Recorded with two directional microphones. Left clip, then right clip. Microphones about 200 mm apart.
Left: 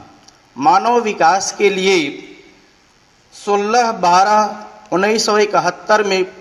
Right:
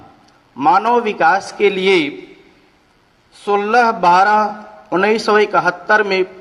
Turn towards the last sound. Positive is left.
turn(degrees=40)  # may be behind; listen again after turning